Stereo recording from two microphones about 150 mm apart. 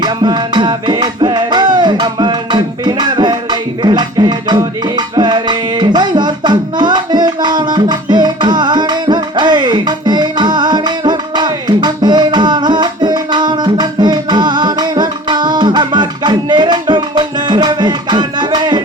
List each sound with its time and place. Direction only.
0.0 s music: 30° right (ahead or behind)